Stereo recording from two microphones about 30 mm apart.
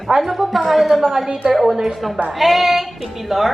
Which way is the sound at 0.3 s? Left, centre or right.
Centre.